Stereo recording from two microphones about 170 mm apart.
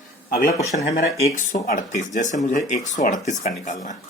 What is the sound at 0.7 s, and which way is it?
Speech, 45° left (ahead or behind).